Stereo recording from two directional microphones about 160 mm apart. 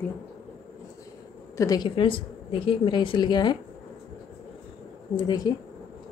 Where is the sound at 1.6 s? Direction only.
25° left (ahead or behind).